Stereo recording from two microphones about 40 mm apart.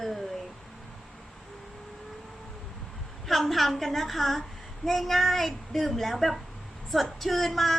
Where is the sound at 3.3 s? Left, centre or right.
Centre.